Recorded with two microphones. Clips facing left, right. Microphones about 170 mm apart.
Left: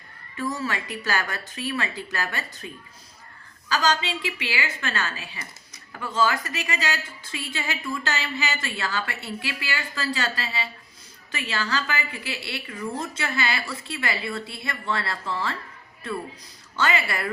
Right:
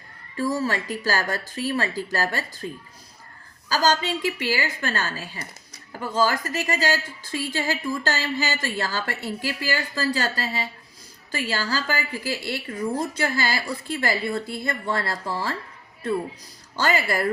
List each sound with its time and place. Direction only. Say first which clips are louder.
0.3 s a woman's voice: right 4 dB; 35° right (ahead or behind)
3.7 s a woman's voice: right 2 dB; 40° right (ahead or behind)
16.7 s a woman's voice: right 2 dB; 40° right (ahead or behind)